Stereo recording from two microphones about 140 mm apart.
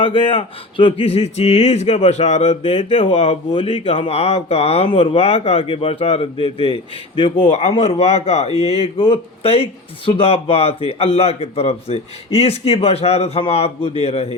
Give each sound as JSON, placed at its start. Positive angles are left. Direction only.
{"t": 0.0, "sound": "speech", "side_deg": 40}